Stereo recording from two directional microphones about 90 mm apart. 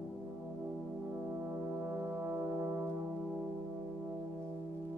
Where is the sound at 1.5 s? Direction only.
25° right (ahead or behind).